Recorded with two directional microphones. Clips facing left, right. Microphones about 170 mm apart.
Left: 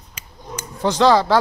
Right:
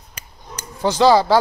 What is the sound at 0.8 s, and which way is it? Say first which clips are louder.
Speech: right 1 dB; 5° right (ahead or behind).